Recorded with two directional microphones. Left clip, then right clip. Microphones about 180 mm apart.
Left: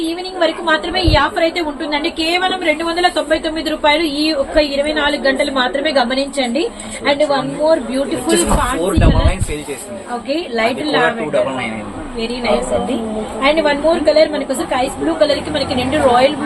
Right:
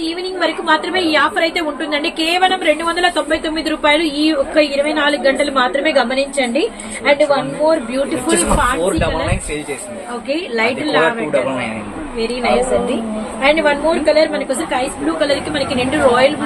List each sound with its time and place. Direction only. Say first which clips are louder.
0.3 s a woman's voice: left 1 dB; 20° right (ahead or behind)
8.3 s speech: left 1 dB; centre (ahead or behind)
10.2 s a woman's voice: even; 20° right (ahead or behind)
13.4 s a woman's voice: even; 15° right (ahead or behind)